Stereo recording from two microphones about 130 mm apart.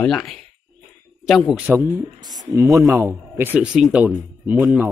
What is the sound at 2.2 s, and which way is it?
A man's voice, 30° right (ahead or behind).